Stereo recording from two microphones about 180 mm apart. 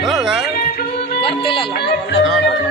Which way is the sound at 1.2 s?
30° left (ahead or behind).